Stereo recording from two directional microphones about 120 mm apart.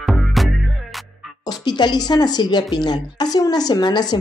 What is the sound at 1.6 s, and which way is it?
A woman's voice, 35° left (ahead or behind).